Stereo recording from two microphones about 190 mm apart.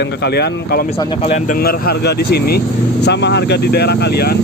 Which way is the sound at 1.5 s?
50° left (ahead or behind).